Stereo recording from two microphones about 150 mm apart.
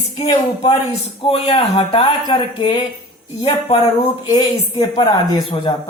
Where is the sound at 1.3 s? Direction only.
45° left (ahead or behind).